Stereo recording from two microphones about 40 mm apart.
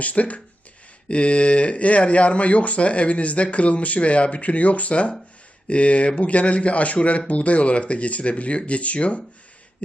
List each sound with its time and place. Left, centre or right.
0.0 s speech: left